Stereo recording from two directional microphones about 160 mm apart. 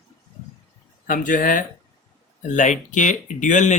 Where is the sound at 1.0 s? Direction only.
60° left (ahead or behind).